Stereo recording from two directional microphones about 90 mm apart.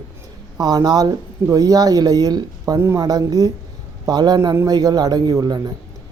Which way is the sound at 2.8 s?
30° right (ahead or behind).